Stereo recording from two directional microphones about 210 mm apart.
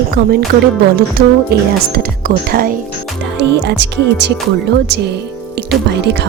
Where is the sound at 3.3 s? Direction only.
55° right (ahead or behind).